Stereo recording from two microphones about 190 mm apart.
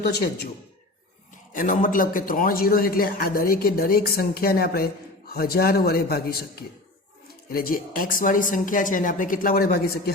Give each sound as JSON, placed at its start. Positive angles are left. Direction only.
{"t": 0.1, "sound": "speech", "side_deg": 55}
{"t": 1.5, "sound": "a man's voice", "side_deg": 45}